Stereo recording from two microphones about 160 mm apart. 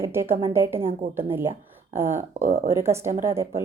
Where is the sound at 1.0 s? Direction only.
55° right (ahead or behind).